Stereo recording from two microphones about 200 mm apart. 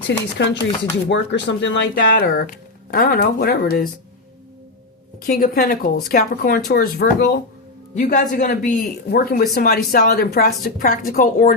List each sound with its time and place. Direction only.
0.3 s speech: 60° left (ahead or behind)
5.2 s speech: 45° left (ahead or behind)
7.9 s speech: 40° left (ahead or behind)